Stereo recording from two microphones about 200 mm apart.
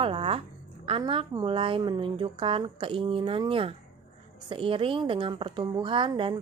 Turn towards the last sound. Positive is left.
turn(degrees=-25)  # may be behind; listen again after turning